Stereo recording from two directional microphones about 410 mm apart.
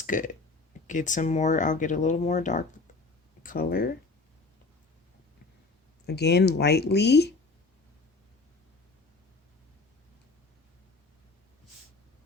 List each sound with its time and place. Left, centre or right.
0.0 s speech: centre
6.1 s speech: left